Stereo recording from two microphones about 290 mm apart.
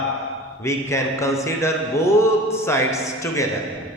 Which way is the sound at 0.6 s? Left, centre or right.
Centre.